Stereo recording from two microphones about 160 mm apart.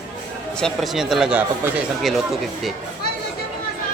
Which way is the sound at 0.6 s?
Centre (ahead or behind).